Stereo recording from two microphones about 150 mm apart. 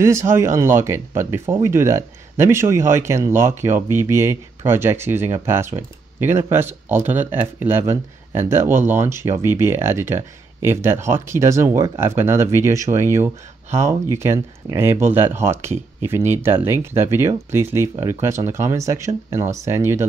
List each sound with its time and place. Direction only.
0.0 s speech: 20° right (ahead or behind)